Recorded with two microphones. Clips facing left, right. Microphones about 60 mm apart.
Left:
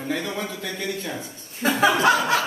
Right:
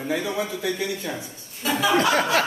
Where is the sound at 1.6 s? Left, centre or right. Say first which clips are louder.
Left 2 dB; left.